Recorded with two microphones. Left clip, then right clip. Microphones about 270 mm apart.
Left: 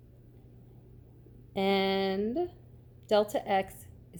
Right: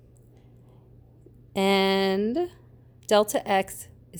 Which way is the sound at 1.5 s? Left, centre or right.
Right.